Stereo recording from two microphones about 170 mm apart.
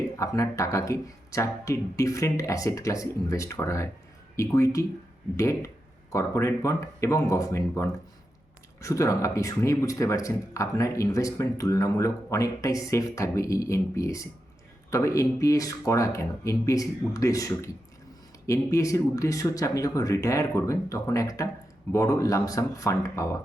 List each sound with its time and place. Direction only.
0.2 s speech: 20° left (ahead or behind)